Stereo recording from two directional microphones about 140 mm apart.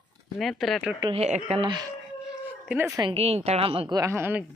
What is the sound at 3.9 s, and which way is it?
Speech, 20° right (ahead or behind).